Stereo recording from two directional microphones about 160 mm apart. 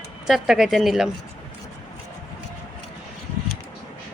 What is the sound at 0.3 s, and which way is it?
Speech, 5° right (ahead or behind).